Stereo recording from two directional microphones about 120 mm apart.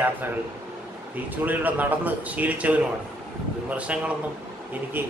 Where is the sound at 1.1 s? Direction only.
15° right (ahead or behind).